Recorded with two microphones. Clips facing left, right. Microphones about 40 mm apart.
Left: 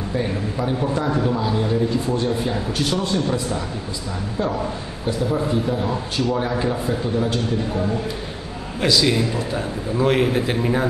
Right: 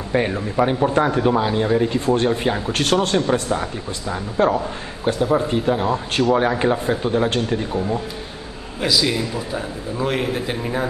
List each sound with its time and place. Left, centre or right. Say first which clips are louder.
0.3 s speech: right 4 dB; right
2.7 s speech: right 5 dB; right
4.4 s speech: right 6 dB; right
5.0 s speech: right 4 dB; right
8.8 s a man's voice: left 2 dB; centre